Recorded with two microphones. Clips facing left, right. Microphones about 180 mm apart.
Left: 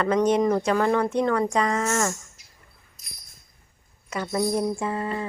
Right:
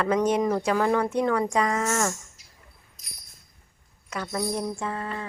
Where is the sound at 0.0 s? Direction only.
10° right (ahead or behind).